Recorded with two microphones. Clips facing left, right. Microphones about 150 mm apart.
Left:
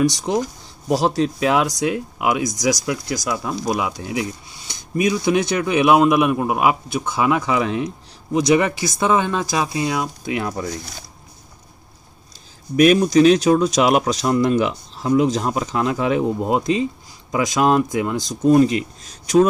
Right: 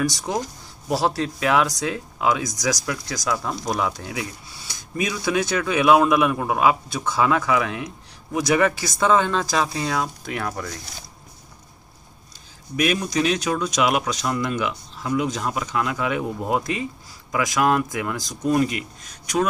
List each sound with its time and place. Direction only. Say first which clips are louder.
0.1 s speech: left 5 dB; 20° left (ahead or behind)
12.7 s speech: left 9 dB; 35° left (ahead or behind)